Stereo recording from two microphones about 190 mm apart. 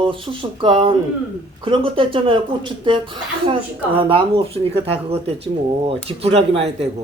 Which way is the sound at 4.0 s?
25° right (ahead or behind).